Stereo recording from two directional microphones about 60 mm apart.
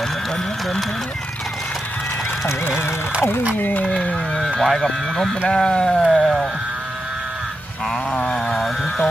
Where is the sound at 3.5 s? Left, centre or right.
Left.